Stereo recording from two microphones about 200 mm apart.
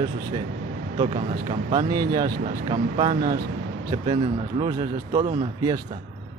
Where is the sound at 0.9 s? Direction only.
30° right (ahead or behind).